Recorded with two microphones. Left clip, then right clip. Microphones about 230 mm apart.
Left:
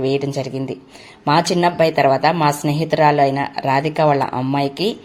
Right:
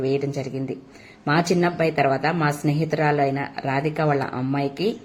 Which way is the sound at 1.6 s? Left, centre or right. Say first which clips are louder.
Left 6 dB; left.